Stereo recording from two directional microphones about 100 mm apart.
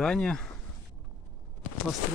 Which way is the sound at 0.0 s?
10° left (ahead or behind).